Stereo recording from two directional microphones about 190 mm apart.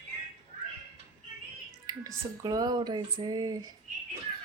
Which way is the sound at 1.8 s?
20° right (ahead or behind).